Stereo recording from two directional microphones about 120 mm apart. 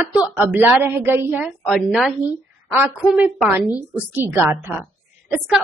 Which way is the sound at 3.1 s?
15° right (ahead or behind).